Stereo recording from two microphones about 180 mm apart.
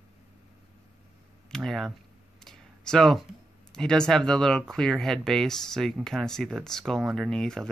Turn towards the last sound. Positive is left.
turn(degrees=5)  # may be behind; listen again after turning